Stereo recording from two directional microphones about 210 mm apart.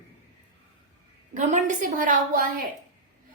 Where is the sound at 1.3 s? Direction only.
35° right (ahead or behind).